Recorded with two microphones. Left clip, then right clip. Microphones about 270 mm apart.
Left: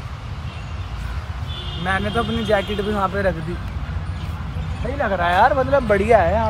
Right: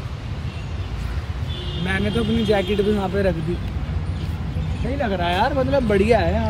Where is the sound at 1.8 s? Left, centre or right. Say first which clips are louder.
Left 3 dB; centre.